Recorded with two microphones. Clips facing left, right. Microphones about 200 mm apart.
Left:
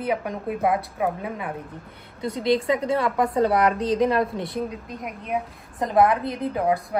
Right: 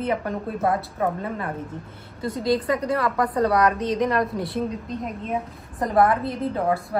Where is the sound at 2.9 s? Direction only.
25° left (ahead or behind).